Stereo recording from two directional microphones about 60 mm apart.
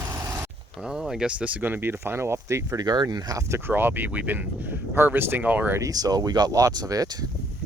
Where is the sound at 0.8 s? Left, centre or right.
Centre; by 2.7 s right.